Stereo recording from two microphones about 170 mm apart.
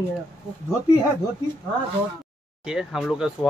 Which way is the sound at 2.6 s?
5° right (ahead or behind).